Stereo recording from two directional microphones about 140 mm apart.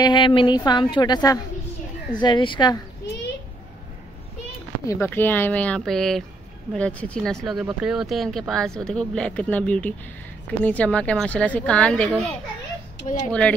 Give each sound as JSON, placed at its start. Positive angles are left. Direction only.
{"t": 0.0, "sound": "a woman's voice", "side_deg": 35}
{"t": 4.8, "sound": "a woman's voice", "side_deg": 15}